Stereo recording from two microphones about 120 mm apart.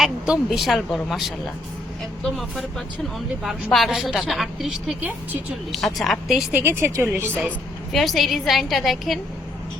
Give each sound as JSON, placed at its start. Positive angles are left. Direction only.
{"t": 0.0, "sound": "speech", "side_deg": 0}
{"t": 6.5, "sound": "speech", "side_deg": -20}
{"t": 7.9, "sound": "speech", "side_deg": 0}